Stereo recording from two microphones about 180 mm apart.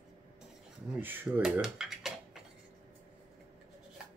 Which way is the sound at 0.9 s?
10° right (ahead or behind).